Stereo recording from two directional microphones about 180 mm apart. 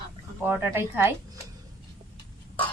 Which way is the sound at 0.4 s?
15° right (ahead or behind).